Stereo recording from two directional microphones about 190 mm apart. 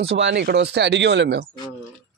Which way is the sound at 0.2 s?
60° right (ahead or behind).